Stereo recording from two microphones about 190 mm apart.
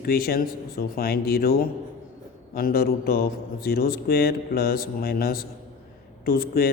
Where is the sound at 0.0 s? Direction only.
50° left (ahead or behind).